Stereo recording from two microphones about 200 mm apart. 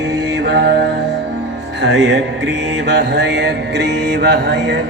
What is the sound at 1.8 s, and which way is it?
Mantra, 60° right (ahead or behind).